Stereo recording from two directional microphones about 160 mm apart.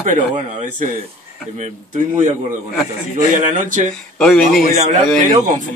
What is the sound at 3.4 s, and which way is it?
Speech, 50° right (ahead or behind).